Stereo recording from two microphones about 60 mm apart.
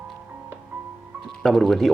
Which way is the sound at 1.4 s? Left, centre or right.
Centre.